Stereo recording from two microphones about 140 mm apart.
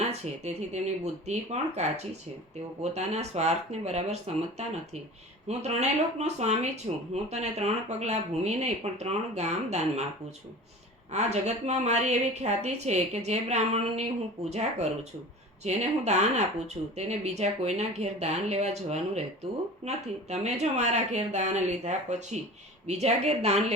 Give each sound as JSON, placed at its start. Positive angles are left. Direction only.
{"t": 0.0, "sound": "speech", "side_deg": -55}
{"t": 11.1, "sound": "speech", "side_deg": -50}
{"t": 15.6, "sound": "speech", "side_deg": -55}